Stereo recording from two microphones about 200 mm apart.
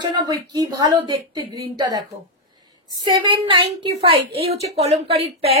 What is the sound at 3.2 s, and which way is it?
Speech, 25° right (ahead or behind).